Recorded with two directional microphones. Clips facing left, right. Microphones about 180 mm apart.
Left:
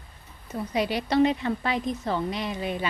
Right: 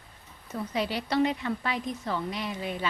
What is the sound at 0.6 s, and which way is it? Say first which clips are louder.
A woman's voice: left 4 dB; 15° left (ahead or behind).